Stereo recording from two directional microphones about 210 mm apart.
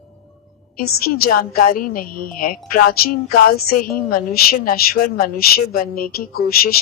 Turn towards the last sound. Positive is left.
turn(degrees=45)  # may be behind; listen again after turning